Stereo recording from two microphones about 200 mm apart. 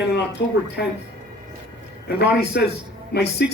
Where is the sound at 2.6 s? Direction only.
55° left (ahead or behind).